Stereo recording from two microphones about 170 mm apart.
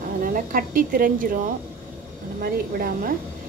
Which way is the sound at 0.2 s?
55° right (ahead or behind).